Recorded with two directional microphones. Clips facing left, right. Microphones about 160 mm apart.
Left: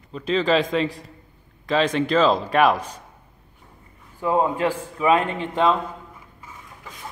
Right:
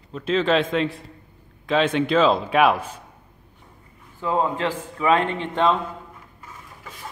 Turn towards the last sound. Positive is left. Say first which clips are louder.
# even
turn(degrees=5)  # may be behind; listen again after turning